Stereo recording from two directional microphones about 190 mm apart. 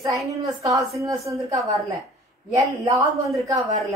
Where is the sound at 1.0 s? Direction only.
15° right (ahead or behind).